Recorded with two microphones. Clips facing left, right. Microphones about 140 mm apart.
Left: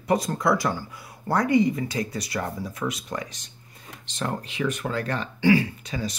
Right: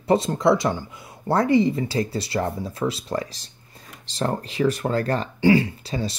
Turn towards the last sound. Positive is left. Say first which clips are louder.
# right 3 dB
turn(degrees=-30)  # may be behind; listen again after turning